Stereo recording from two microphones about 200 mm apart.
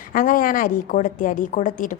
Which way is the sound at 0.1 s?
45° left (ahead or behind).